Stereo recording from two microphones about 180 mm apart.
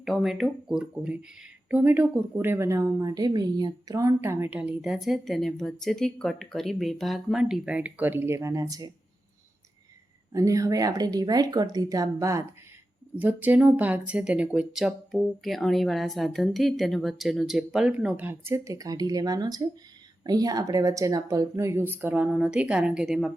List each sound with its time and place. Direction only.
0.0 s speech: centre (ahead or behind); by 8.9 s 20° right (ahead or behind)
10.3 s speech: 20° right (ahead or behind); by 23.3 s centre (ahead or behind)